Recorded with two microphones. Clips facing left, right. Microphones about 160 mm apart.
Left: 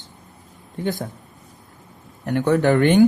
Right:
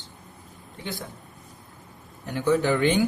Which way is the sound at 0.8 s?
45° left (ahead or behind).